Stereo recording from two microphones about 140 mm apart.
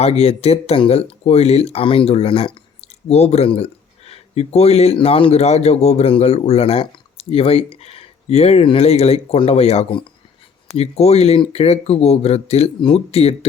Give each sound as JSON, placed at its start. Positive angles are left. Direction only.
{"t": 0.0, "sound": "speech", "side_deg": 45}